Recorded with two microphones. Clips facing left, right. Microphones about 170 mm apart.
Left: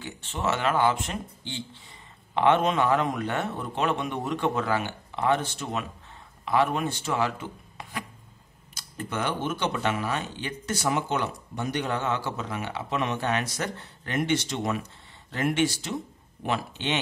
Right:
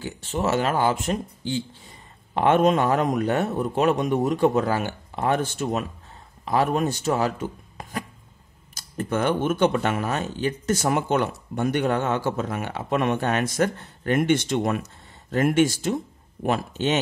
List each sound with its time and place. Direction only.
0.0 s speech: 40° right (ahead or behind)